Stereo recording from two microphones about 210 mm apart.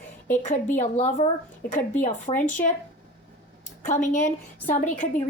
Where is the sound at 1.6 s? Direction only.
45° left (ahead or behind).